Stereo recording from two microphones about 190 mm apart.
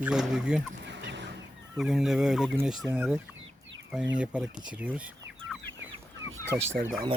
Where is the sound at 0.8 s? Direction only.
65° right (ahead or behind).